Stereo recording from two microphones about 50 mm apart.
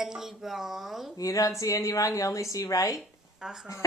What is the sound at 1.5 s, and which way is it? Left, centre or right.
A woman's voice, left.